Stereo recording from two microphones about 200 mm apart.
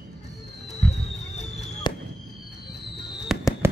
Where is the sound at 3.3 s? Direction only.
Centre (ahead or behind).